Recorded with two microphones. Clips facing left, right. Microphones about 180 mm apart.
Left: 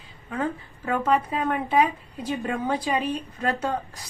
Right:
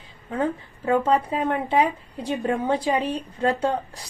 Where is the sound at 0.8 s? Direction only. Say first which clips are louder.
Right 3 dB; 30° right (ahead or behind).